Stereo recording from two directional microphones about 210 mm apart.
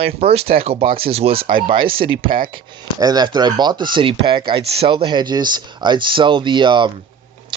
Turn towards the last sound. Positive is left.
turn(degrees=-20)  # may be behind; listen again after turning